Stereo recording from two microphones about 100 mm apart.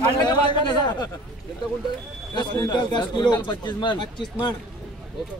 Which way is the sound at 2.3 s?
45° left (ahead or behind).